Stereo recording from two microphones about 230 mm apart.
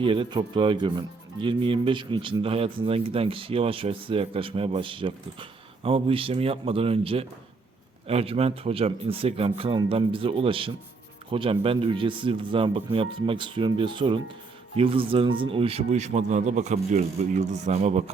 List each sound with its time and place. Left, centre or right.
0.0 s a man's voice: right